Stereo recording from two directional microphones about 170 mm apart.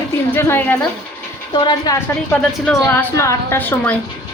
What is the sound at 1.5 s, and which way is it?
Speech, 25° left (ahead or behind).